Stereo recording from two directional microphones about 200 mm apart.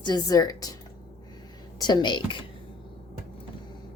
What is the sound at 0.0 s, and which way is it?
Speech, 20° left (ahead or behind).